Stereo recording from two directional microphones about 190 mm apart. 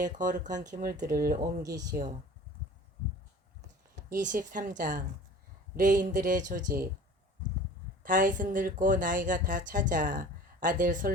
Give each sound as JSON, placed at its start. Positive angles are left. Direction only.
{"t": 0.0, "sound": "speech", "side_deg": -40}
{"t": 1.6, "sound": "speech", "side_deg": -20}
{"t": 4.1, "sound": "speech", "side_deg": -45}
{"t": 8.0, "sound": "speech", "side_deg": -45}